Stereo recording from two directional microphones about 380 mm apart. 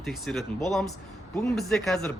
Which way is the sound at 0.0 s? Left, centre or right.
Centre.